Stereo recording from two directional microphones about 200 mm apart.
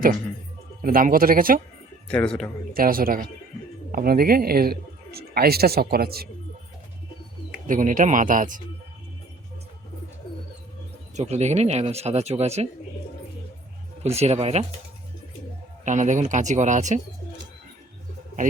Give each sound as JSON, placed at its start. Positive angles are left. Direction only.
{"t": 0.8, "sound": "a man's voice", "side_deg": -45}
{"t": 2.0, "sound": "a man's voice", "side_deg": 5}
{"t": 2.7, "sound": "a man's voice", "side_deg": -45}
{"t": 7.7, "sound": "speech", "side_deg": -40}
{"t": 11.2, "sound": "speech", "side_deg": -35}
{"t": 14.0, "sound": "speech", "side_deg": -30}
{"t": 15.8, "sound": "speech", "side_deg": -35}